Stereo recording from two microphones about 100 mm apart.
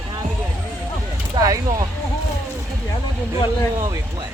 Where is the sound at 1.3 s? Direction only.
35° right (ahead or behind).